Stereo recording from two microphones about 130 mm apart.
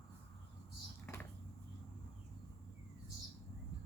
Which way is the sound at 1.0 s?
15° left (ahead or behind).